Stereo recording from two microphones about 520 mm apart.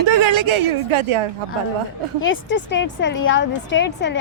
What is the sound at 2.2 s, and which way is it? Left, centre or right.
Speech, left.